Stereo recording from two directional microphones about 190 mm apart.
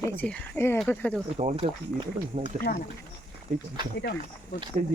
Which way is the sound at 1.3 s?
35° right (ahead or behind).